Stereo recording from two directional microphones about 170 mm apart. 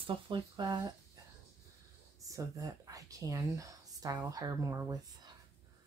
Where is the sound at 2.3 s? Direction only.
20° right (ahead or behind).